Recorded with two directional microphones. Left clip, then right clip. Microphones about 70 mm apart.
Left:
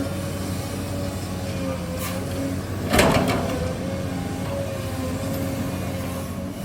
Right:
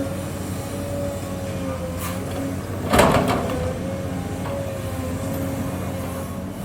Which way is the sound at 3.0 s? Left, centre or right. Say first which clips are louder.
Right 2 dB; right.